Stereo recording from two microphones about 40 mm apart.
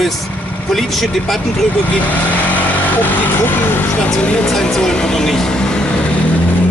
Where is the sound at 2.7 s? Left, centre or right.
Left.